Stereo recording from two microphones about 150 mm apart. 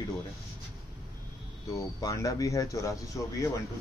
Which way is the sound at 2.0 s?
20° left (ahead or behind).